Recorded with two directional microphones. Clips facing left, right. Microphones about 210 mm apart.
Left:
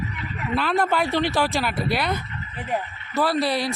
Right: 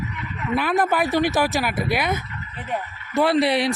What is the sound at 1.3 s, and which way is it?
Speech, 5° right (ahead or behind).